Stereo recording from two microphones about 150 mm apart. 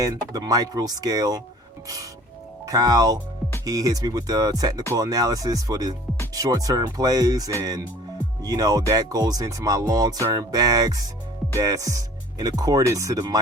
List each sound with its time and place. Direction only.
0.0 s speech: 25° right (ahead or behind)
2.6 s speech: 25° right (ahead or behind)